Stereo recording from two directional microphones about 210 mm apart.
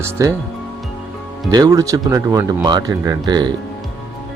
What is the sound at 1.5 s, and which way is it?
Speech, 20° right (ahead or behind).